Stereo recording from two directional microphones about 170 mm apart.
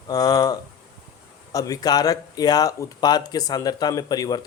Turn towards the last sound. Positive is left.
turn(degrees=25)  # may be behind; listen again after turning